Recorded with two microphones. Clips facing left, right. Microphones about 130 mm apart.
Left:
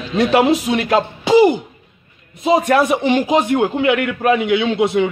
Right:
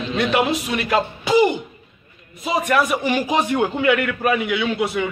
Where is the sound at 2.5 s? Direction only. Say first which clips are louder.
Left 5 dB; 30° left (ahead or behind).